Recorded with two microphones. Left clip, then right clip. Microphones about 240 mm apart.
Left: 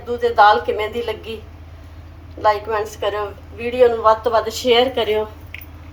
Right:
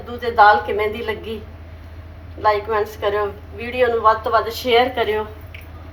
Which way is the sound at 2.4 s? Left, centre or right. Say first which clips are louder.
Even; left.